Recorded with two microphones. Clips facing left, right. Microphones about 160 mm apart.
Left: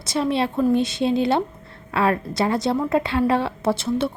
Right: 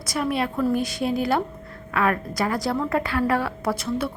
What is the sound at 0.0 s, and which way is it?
A woman's voice, 25° left (ahead or behind).